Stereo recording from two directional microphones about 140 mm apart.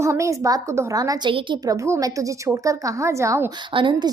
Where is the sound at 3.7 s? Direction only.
35° right (ahead or behind).